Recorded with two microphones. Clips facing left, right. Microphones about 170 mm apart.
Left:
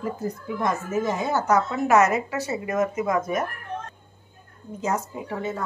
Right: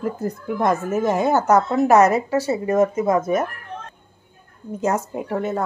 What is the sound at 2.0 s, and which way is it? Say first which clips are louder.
Speech: right 2 dB; 35° right (ahead or behind).